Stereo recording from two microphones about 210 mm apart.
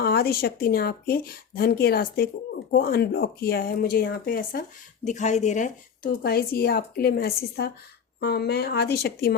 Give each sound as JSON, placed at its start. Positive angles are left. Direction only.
{"t": 0.0, "sound": "a woman's voice", "side_deg": 45}
{"t": 5.0, "sound": "a woman's voice", "side_deg": 35}